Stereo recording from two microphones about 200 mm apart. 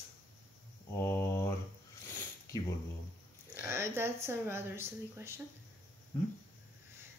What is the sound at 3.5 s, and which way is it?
A woman's voice, 10° right (ahead or behind).